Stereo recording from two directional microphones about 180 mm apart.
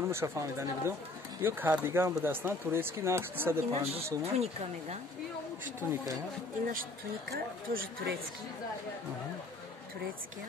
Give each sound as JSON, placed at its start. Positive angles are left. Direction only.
{"t": 0.1, "sound": "speech", "side_deg": -15}
{"t": 3.7, "sound": "speech", "side_deg": -35}
{"t": 6.7, "sound": "speech", "side_deg": -55}